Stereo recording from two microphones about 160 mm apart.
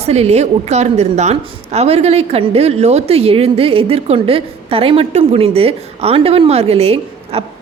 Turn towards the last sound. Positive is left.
turn(degrees=-40)  # may be behind; listen again after turning